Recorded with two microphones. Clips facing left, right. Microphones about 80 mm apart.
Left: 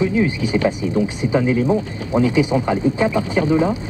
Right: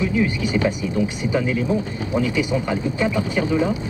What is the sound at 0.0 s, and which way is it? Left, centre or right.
Speech, left.